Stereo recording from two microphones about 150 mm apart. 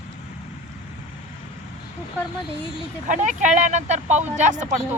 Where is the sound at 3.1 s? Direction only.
50° right (ahead or behind).